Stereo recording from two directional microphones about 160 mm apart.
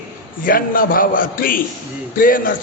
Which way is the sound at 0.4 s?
60° left (ahead or behind).